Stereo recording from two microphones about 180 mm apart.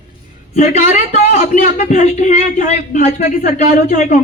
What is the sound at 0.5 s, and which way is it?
A woman's voice, 45° left (ahead or behind).